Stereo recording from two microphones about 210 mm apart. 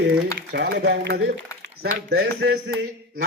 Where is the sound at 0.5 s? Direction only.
50° right (ahead or behind).